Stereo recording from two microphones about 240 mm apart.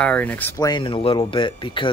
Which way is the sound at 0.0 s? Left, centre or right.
Centre.